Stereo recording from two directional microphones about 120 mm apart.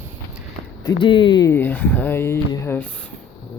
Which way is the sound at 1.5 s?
15° left (ahead or behind).